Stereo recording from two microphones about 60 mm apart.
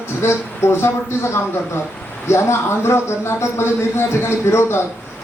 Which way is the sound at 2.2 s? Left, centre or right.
Left.